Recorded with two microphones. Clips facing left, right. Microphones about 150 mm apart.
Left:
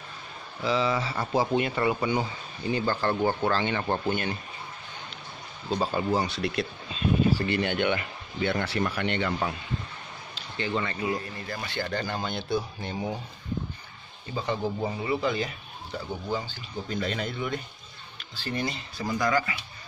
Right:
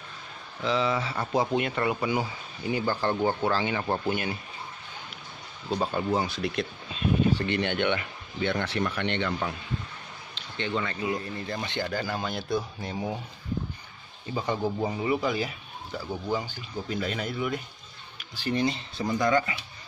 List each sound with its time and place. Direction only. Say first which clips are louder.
0.6 s speech: even; centre (ahead or behind)
5.7 s speech: left 1 dB; 5° left (ahead or behind)
10.6 s speech: left 1 dB; 5° left (ahead or behind)
11.1 s speech: right 2 dB; 25° right (ahead or behind)
11.9 s speech: even; 5° right (ahead or behind)
14.3 s speech: right 1 dB; 15° right (ahead or behind)
18.3 s speech: right 4 dB; 15° right (ahead or behind)